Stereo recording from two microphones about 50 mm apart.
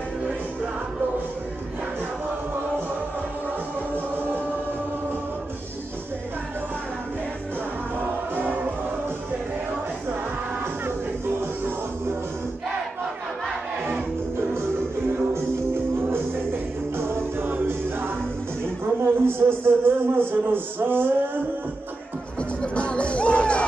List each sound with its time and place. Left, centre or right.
8.0 s music: right
16.9 s music: right
17.5 s music: right
18.9 s a sound: right
22.6 s music: left